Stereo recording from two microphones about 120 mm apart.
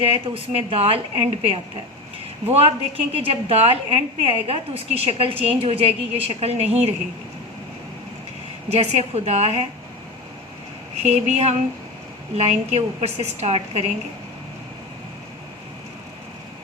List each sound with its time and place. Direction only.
0.0 s a woman's voice: 50° right (ahead or behind)
8.7 s a woman's voice: 65° right (ahead or behind)
10.9 s a woman's voice: 65° right (ahead or behind)